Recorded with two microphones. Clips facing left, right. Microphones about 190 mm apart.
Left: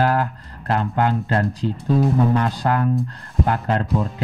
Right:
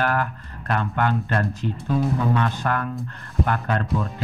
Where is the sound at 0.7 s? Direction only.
25° left (ahead or behind).